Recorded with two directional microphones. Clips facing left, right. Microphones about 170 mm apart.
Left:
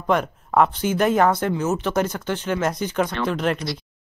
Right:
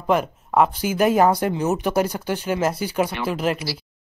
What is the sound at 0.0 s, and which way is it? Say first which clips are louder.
Speech: right 1 dB; 5° right (ahead or behind).